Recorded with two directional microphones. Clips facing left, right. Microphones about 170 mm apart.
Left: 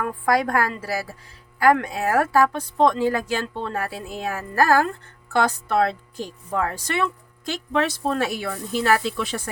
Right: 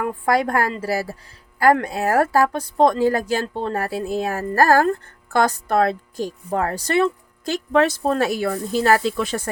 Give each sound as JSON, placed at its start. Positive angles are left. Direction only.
{"t": 0.0, "sound": "a woman's voice", "side_deg": -25}